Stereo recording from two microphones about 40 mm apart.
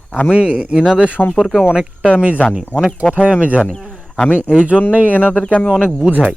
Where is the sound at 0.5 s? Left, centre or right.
Right.